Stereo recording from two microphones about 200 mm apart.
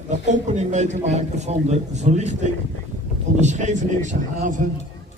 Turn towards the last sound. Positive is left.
turn(degrees=-40)  # may be behind; listen again after turning